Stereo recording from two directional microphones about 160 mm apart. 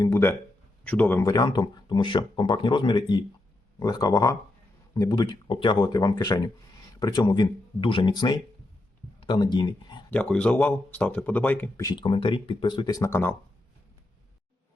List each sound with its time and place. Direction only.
0.0 s speech: 15° left (ahead or behind)
1.3 s speech: 25° left (ahead or behind)
10.1 s speech: 5° left (ahead or behind)
11.8 s speech: 25° left (ahead or behind)